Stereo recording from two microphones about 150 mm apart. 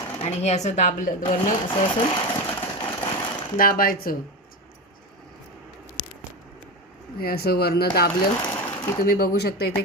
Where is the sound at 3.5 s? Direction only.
70° left (ahead or behind).